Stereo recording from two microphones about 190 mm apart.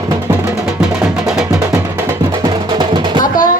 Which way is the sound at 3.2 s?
45° left (ahead or behind).